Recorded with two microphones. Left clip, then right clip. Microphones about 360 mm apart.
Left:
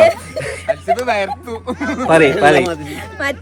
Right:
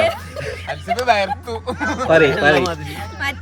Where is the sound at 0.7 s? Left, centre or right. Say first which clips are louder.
Left 1 dB; right.